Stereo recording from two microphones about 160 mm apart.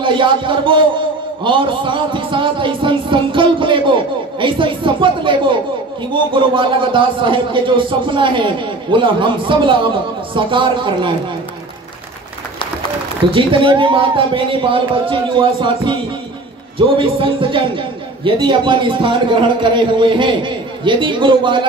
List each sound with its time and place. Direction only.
0.0 s a man's voice: 30° right (ahead or behind)
13.3 s speech: 35° right (ahead or behind)